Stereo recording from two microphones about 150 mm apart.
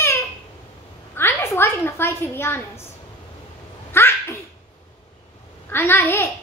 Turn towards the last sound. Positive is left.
turn(degrees=15)  # may be behind; listen again after turning